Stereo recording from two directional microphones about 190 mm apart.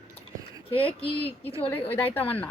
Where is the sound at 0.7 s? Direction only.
30° left (ahead or behind).